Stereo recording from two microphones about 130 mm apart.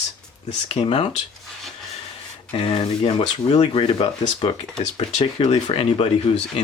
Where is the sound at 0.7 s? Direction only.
50° left (ahead or behind).